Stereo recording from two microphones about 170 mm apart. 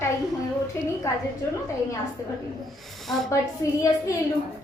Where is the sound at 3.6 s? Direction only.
15° left (ahead or behind).